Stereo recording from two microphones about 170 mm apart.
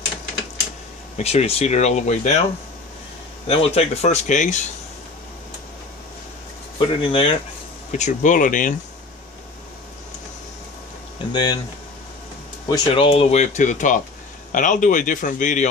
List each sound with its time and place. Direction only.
1.1 s speech: 40° left (ahead or behind)
3.4 s speech: 35° left (ahead or behind)
6.8 s speech: 30° left (ahead or behind)
7.9 s speech: 45° left (ahead or behind)
11.3 s speech: 25° left (ahead or behind)
12.6 s speech: 25° left (ahead or behind); by 15.7 s 50° left (ahead or behind)